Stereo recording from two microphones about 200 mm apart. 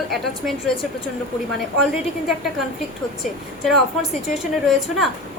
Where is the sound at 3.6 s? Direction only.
Centre (ahead or behind).